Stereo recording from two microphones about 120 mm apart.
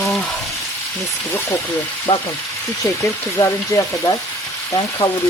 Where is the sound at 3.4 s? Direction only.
30° left (ahead or behind).